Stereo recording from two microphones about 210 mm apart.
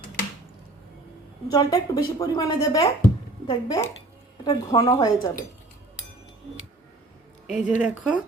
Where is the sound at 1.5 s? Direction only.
20° left (ahead or behind).